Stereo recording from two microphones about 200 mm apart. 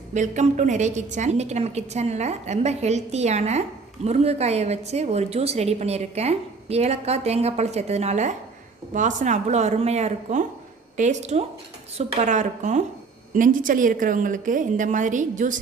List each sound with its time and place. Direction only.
0.1 s a woman's voice: 35° right (ahead or behind)